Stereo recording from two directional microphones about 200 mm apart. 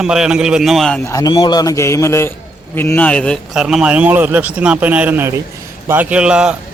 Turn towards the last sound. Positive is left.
turn(degrees=-5)  # may be behind; listen again after turning